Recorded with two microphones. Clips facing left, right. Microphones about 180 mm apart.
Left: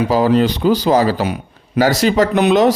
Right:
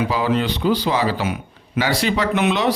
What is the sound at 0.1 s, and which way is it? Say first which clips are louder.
A man's voice: left 7 dB; 40° left (ahead or behind).